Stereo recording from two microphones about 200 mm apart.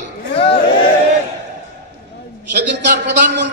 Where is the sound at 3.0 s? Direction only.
60° right (ahead or behind).